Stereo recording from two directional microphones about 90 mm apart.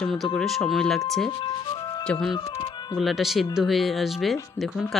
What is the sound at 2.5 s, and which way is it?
Music, 65° left (ahead or behind).